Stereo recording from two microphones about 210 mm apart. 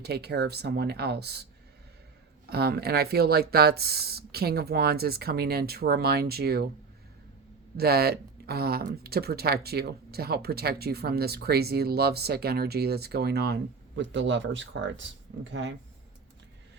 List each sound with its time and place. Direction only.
0.0 s speech: 50° right (ahead or behind)
2.5 s speech: 50° right (ahead or behind)
7.8 s speech: 45° right (ahead or behind)